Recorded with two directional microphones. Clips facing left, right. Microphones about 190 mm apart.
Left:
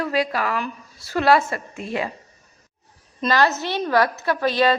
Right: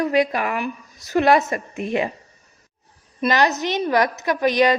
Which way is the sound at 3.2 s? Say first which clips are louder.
Right 1 dB; 15° right (ahead or behind).